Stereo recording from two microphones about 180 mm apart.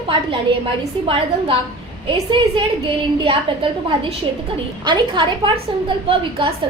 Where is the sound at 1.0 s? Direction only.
30° right (ahead or behind).